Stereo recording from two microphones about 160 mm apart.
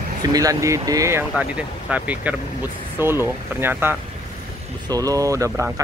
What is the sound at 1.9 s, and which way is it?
Speech, 10° right (ahead or behind).